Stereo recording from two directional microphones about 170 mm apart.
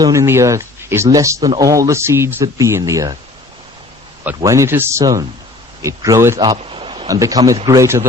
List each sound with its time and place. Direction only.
0.0 s speech: 20° right (ahead or behind)
4.4 s speech: 15° right (ahead or behind)
6.6 s a sound: 30° right (ahead or behind)
7.1 s speech: 20° right (ahead or behind)